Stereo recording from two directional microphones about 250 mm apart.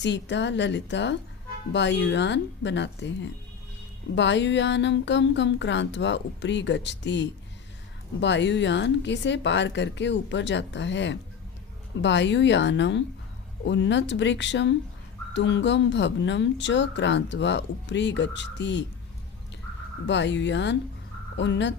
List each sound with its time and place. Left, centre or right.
0.0 s speech: left
20.1 s speech: left